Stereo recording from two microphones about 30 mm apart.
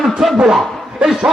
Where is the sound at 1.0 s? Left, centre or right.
Right.